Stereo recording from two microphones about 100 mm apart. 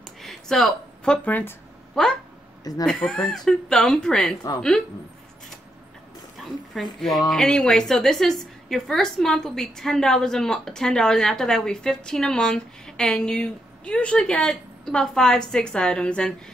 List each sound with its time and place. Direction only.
0.0 s a sound: 5° left (ahead or behind)
2.0 s a woman's voice: 5° left (ahead or behind)
2.6 s speech: 40° left (ahead or behind)
2.9 s a woman's voice: 5° left (ahead or behind)
6.7 s a woman's voice: centre (ahead or behind)